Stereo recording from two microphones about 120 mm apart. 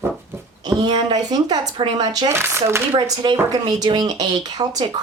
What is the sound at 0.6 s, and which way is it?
A woman's voice, 35° right (ahead or behind).